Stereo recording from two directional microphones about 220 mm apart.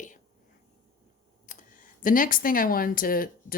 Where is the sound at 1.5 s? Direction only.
35° left (ahead or behind).